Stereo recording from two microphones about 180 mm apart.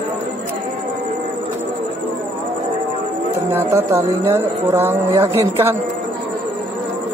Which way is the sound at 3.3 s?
15° right (ahead or behind).